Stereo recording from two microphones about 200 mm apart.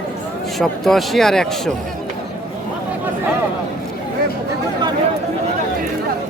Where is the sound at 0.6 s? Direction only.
Centre (ahead or behind).